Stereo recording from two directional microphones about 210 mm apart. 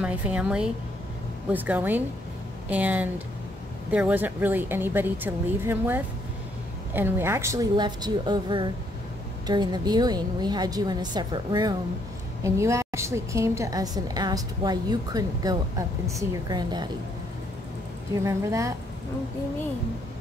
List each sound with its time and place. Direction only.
0.0 s a woman's voice: 5° right (ahead or behind)
18.2 s a woman's voice: 15° right (ahead or behind)